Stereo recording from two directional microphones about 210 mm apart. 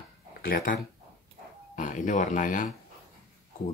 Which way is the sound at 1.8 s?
35° left (ahead or behind).